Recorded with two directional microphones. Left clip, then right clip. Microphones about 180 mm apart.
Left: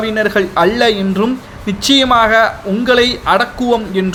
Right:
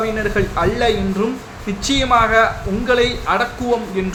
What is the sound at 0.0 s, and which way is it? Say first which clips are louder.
A man's voice: left 5 dB; 40° left (ahead or behind).